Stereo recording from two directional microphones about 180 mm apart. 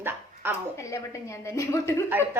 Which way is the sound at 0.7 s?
15° left (ahead or behind).